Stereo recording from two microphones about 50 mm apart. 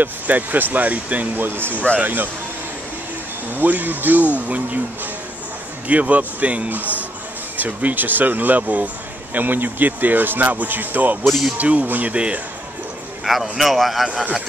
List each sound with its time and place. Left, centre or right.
0.0 s speech: right
3.5 s speech: right
5.9 s a man's voice: right
12.1 s a man's voice: right
13.2 s speech: centre